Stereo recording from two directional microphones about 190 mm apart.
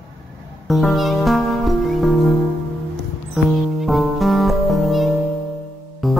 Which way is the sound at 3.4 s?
Centre (ahead or behind).